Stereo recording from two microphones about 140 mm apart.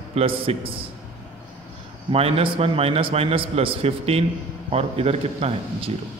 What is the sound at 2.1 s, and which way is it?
A man's voice, 45° right (ahead or behind).